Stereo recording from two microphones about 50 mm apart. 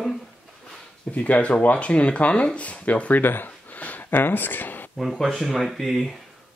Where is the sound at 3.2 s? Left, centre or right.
Left.